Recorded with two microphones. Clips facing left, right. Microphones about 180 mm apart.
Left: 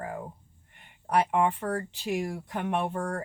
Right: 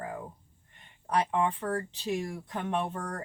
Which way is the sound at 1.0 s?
15° left (ahead or behind).